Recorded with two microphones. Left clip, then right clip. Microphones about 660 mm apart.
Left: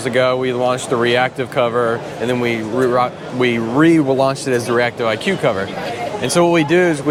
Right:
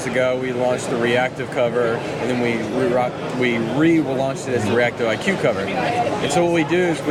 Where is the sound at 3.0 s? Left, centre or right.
Left.